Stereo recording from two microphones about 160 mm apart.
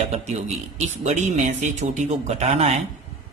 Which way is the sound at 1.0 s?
45° right (ahead or behind).